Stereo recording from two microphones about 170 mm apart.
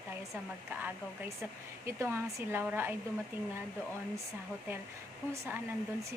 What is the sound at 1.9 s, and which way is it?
A woman's voice, 15° right (ahead or behind).